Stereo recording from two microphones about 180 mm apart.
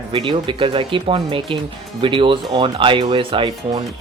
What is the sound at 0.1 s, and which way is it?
Speech, 30° right (ahead or behind).